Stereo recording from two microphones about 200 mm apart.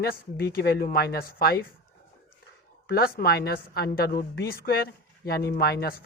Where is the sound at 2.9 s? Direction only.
50° left (ahead or behind).